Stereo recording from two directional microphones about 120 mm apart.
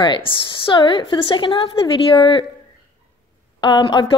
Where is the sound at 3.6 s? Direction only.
40° left (ahead or behind).